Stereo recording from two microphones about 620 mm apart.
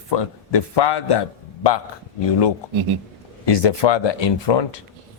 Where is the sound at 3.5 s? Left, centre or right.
Left.